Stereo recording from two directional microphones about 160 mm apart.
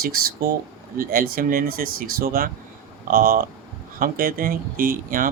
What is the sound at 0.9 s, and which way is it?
Speech, 65° right (ahead or behind).